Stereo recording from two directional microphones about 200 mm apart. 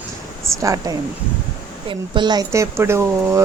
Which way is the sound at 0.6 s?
15° right (ahead or behind).